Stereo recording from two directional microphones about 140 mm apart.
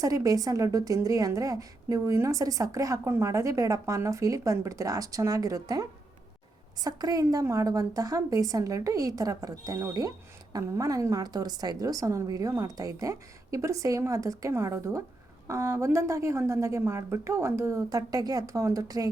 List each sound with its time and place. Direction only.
0.0 s a woman's voice: 25° right (ahead or behind)